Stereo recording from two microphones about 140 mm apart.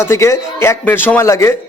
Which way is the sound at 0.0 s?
20° left (ahead or behind).